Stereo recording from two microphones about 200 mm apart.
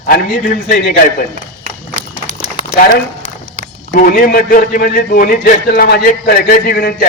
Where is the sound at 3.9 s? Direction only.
45° left (ahead or behind).